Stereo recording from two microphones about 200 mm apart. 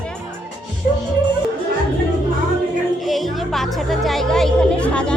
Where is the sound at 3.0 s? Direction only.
Centre (ahead or behind).